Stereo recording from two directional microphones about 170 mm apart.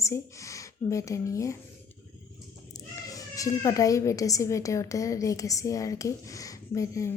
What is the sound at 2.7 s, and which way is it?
A child's voice, 20° left (ahead or behind).